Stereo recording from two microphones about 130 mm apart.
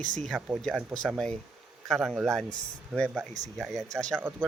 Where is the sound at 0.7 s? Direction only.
5° left (ahead or behind).